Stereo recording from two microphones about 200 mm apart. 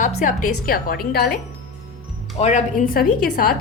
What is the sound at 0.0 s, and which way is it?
A woman's voice, 40° left (ahead or behind).